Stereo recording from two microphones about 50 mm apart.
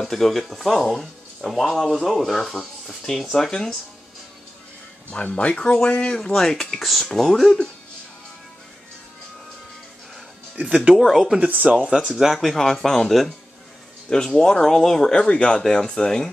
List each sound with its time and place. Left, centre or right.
0.0 s speech: centre
5.1 s speech: left; by 7.5 s centre
10.6 s speech: right
11.0 s speech: centre
11.7 s speech: right
12.2 s speech: centre